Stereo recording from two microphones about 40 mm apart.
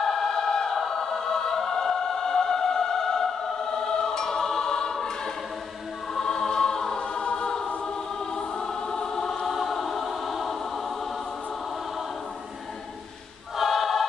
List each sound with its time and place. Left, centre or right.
0.0 s choir: centre
13.6 s choir: centre